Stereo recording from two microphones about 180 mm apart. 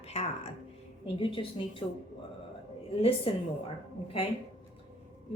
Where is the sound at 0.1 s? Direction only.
35° left (ahead or behind).